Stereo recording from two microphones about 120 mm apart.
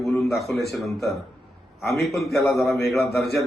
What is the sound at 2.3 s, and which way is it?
Speech, 25° left (ahead or behind).